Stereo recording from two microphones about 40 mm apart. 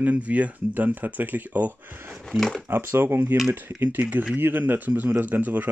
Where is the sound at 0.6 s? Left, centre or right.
Right.